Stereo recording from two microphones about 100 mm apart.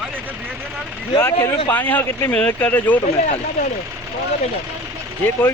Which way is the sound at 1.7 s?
15° left (ahead or behind).